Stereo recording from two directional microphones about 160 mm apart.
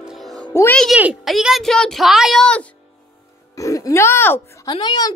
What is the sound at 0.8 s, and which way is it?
Speech, 5° right (ahead or behind).